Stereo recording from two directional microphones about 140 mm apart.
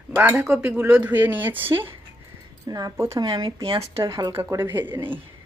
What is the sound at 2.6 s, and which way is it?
Speech, 25° right (ahead or behind).